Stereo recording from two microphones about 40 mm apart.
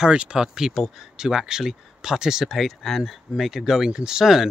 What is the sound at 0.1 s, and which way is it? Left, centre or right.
Speech, right.